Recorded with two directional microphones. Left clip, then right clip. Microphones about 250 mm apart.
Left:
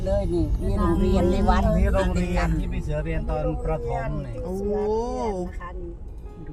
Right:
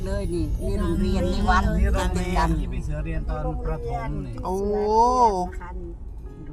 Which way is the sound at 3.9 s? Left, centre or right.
Right.